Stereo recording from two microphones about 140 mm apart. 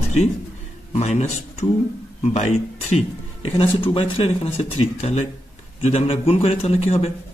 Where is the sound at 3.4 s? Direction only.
40° left (ahead or behind).